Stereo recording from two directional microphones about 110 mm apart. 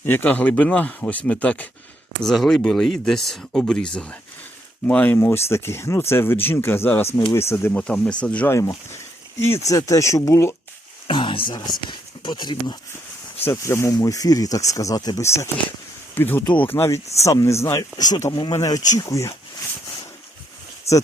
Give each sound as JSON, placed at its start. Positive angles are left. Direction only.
{"t": 0.0, "sound": "speech", "side_deg": 20}
{"t": 2.2, "sound": "speech", "side_deg": 0}
{"t": 7.8, "sound": "speech", "side_deg": 10}
{"t": 8.4, "sound": "speech", "side_deg": 25}
{"t": 11.1, "sound": "a sound", "side_deg": 50}
{"t": 11.9, "sound": "speech", "side_deg": 40}
{"t": 13.4, "sound": "speech", "side_deg": 25}
{"t": 17.7, "sound": "speech", "side_deg": 35}
{"t": 20.9, "sound": "speech", "side_deg": 25}